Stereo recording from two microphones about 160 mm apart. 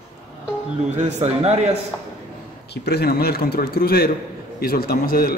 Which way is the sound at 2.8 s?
80° left.